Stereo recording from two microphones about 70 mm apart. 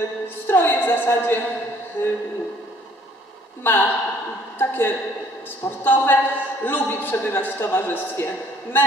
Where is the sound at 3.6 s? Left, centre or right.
Left.